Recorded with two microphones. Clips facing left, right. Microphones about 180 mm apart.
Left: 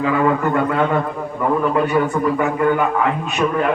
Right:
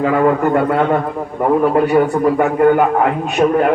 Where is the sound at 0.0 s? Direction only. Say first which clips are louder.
Right 4 dB; 45° right (ahead or behind).